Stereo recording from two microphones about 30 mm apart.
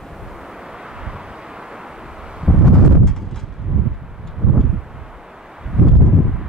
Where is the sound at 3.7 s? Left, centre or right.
Centre.